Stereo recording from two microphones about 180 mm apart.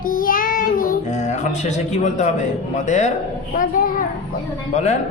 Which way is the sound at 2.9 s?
40° left (ahead or behind).